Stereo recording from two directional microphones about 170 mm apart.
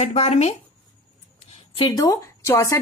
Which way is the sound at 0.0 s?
40° left (ahead or behind).